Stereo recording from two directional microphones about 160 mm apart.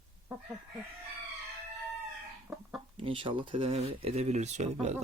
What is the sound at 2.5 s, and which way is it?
Speech, centre (ahead or behind).